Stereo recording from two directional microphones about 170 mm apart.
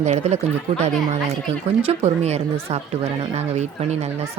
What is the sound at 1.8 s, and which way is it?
Speech, 40° right (ahead or behind).